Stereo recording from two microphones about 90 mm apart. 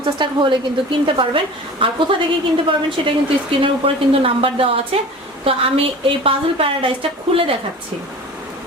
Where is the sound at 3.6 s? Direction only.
90° right.